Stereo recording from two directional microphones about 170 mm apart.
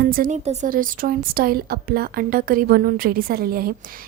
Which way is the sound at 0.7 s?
55° right (ahead or behind).